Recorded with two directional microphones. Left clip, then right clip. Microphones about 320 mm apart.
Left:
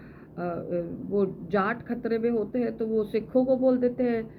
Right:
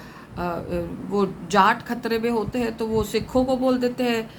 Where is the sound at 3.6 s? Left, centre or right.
Right.